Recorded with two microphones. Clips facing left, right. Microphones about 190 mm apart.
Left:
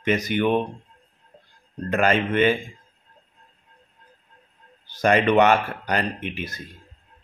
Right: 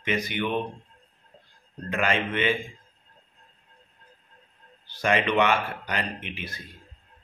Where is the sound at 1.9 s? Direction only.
40° left (ahead or behind).